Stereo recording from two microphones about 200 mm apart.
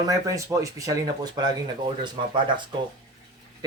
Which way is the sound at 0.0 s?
15° right (ahead or behind).